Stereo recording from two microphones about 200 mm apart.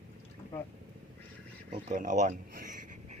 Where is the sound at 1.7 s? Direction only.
40° right (ahead or behind).